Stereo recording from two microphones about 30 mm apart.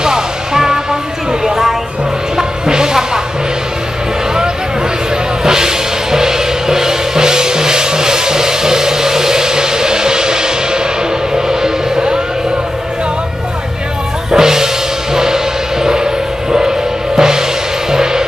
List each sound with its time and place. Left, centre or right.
0.0 s music: right
1.4 s a sound: centre
2.3 s music: right
5.4 s music: right
14.3 s music: centre